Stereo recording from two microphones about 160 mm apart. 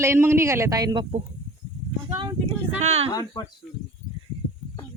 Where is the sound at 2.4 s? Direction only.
45° right (ahead or behind).